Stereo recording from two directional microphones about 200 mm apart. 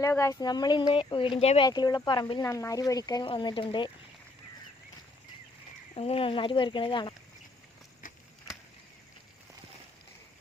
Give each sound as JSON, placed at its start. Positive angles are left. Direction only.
{"t": 0.0, "sound": "speech", "side_deg": 15}
{"t": 6.0, "sound": "speech", "side_deg": 30}